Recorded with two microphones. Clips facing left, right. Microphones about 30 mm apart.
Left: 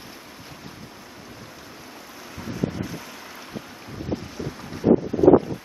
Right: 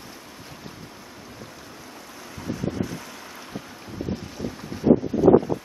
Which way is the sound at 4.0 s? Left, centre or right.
Centre.